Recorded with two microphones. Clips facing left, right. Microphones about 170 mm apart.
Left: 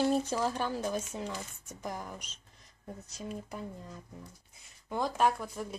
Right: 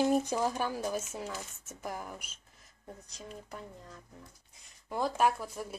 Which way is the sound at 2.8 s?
10° left (ahead or behind).